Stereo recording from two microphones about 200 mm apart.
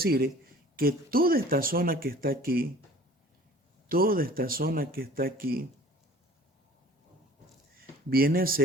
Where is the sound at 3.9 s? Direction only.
45° right (ahead or behind).